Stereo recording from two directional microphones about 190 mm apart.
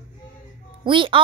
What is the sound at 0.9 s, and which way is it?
Speech, 25° right (ahead or behind).